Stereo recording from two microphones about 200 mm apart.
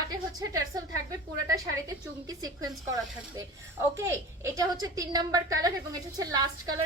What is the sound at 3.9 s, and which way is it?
A woman's voice, 15° right (ahead or behind).